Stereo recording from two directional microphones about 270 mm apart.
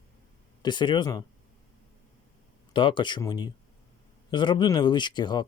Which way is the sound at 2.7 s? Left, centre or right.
Centre.